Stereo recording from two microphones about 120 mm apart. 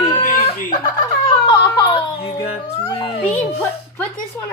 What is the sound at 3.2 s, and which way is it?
Speech, 15° left (ahead or behind).